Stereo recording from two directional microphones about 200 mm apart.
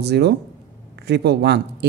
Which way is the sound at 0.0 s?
55° right (ahead or behind).